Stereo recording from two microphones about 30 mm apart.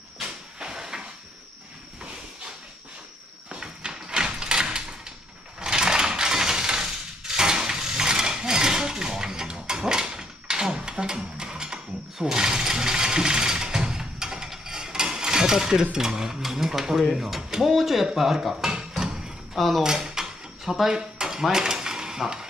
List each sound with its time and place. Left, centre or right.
0.2 s train: right
3.4 s sliding door: right
5.6 s mechanisms: right
12.4 s ratchet: right
17.0 s speech: centre
17.4 s speech: right
17.6 s speech: centre
18.1 s a sound: centre
19.5 s speech: centre
19.8 s speech: centre
20.9 s dishes: centre